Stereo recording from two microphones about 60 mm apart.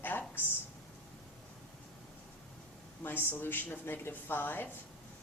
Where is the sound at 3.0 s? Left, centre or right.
Left.